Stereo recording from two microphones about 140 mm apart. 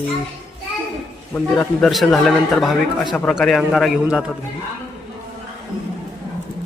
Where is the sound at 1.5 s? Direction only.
Centre (ahead or behind).